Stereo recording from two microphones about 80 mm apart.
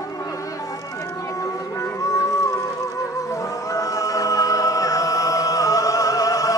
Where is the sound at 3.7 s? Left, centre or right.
Left.